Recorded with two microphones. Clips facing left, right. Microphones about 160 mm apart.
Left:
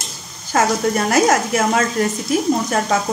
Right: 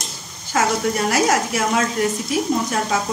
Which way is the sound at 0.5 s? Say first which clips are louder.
Left 3 dB; 40° left (ahead or behind).